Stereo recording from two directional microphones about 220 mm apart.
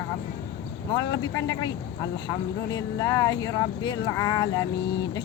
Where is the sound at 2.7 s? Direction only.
15° left (ahead or behind).